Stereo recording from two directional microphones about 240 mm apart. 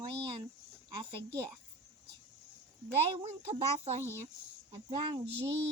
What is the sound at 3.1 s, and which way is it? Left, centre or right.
Speech, right.